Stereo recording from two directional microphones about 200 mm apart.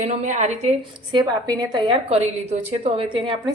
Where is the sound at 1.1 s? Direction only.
20° right (ahead or behind).